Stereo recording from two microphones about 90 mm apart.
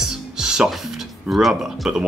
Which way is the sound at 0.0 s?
5° right (ahead or behind).